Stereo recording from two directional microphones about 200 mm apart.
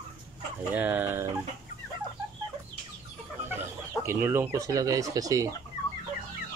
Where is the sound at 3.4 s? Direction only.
10° right (ahead or behind).